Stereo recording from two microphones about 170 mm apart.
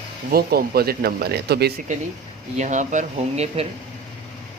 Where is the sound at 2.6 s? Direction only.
45° right (ahead or behind).